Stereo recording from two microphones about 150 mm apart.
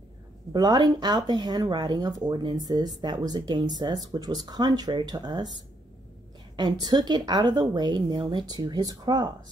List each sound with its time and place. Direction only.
0.5 s speech: 25° right (ahead or behind)
6.5 s speech: 30° right (ahead or behind)